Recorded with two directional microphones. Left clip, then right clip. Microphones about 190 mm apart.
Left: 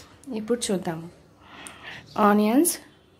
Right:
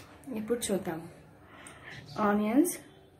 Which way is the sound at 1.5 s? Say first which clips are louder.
Left 7 dB; 50° left (ahead or behind).